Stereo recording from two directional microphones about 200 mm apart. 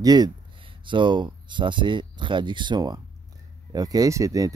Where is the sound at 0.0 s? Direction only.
20° right (ahead or behind).